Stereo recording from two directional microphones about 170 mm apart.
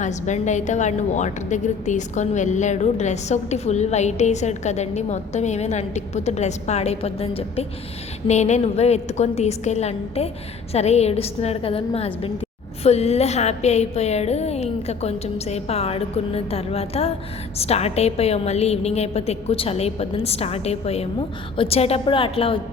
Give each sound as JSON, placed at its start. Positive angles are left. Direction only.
{"t": 0.0, "sound": "a woman's voice", "side_deg": 45}